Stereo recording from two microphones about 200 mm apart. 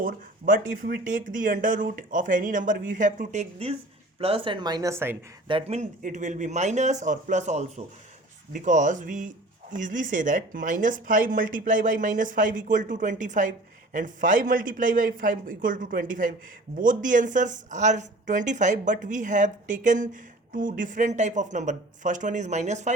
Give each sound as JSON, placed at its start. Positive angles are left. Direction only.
{"t": 0.0, "sound": "speech", "side_deg": -45}
{"t": 5.5, "sound": "speech", "side_deg": -30}